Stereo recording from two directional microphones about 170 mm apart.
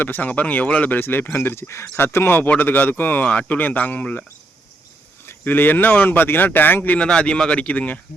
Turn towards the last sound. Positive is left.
turn(degrees=5)  # may be behind; listen again after turning